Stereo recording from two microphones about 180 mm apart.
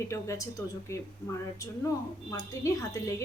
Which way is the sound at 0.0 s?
15° left (ahead or behind).